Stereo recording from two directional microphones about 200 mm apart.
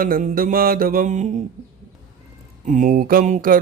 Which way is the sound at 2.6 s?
40° right (ahead or behind).